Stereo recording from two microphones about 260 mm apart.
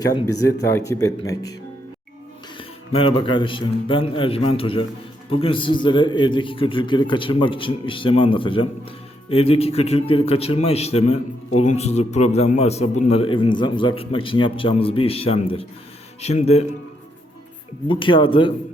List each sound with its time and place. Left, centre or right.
0.0 s speech: centre
2.6 s a man's voice: left
17.8 s a man's voice: centre